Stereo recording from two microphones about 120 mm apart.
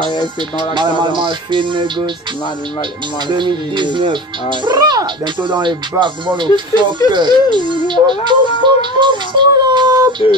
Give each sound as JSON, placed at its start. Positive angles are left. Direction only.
{"t": 0.7, "sound": "music", "side_deg": -40}
{"t": 3.3, "sound": "music", "side_deg": -40}